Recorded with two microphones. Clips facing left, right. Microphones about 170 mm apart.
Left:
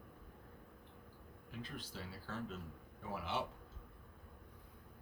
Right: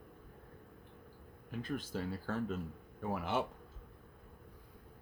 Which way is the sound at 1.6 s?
50° right (ahead or behind).